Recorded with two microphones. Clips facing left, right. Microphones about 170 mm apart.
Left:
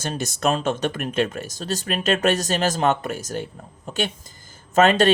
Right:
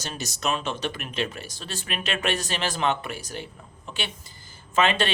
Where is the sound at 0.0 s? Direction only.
50° left (ahead or behind).